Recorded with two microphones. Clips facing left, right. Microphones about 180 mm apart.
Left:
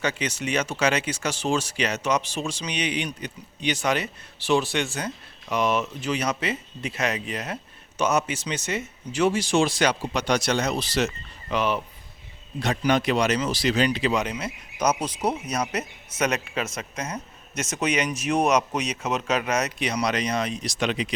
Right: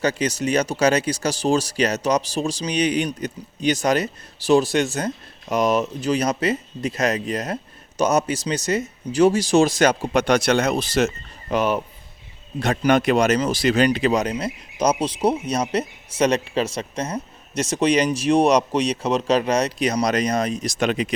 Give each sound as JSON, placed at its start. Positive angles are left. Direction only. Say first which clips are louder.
{"t": 0.0, "sound": "speech", "louder": "right 6 dB", "side_deg": -40}